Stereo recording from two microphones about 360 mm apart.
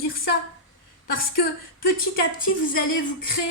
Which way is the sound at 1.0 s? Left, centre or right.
Left.